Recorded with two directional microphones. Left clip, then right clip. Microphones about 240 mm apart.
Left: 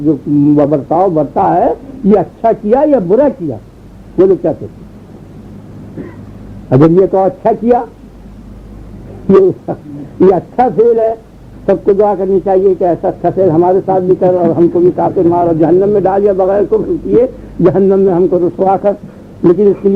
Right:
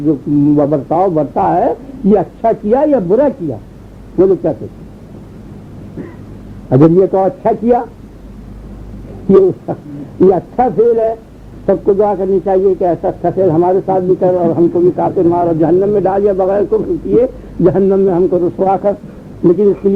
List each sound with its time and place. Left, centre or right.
0.1 s a man's voice: left
6.7 s a man's voice: left
9.3 s a man's voice: left